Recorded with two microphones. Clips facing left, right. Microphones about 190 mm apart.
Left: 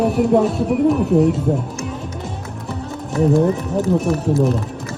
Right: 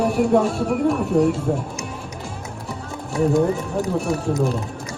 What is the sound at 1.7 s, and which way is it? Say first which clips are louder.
Music: left 4 dB; 15° right (ahead or behind).